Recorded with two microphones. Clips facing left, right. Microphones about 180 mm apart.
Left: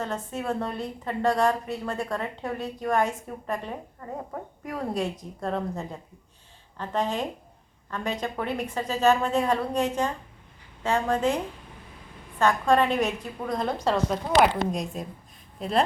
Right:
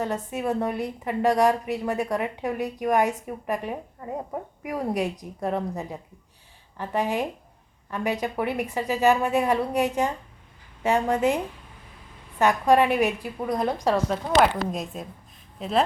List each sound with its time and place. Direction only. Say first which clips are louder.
0.0 s a woman's voice: right 3 dB; 15° right (ahead or behind)
12.4 s a woman's voice: right 2 dB; 15° right (ahead or behind)